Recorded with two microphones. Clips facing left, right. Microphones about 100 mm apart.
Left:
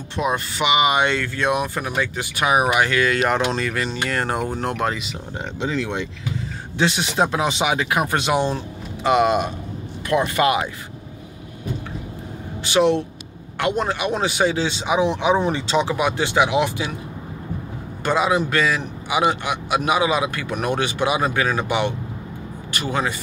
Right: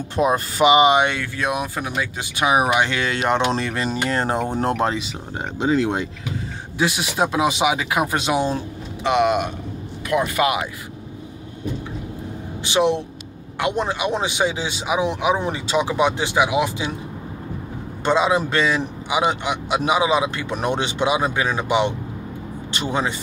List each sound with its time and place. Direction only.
0.1 s speech: 40° right (ahead or behind)
0.9 s a man's voice: 15° right (ahead or behind); by 5.1 s 30° right (ahead or behind)
6.8 s speech: 10° right (ahead or behind)
9.0 s speech: centre (ahead or behind)
12.6 s speech: 15° right (ahead or behind)
16.0 s speech: 20° right (ahead or behind)
18.0 s a man's voice: 25° right (ahead or behind)